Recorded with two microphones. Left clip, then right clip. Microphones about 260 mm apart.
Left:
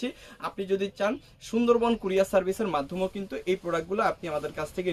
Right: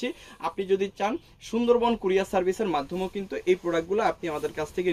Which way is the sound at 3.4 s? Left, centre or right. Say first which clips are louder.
Right 3 dB; centre.